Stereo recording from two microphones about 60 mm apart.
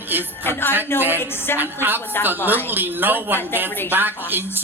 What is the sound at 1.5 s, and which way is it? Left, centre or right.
Speech, right.